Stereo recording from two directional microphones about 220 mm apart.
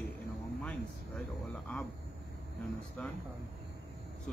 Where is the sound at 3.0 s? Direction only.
5° left (ahead or behind).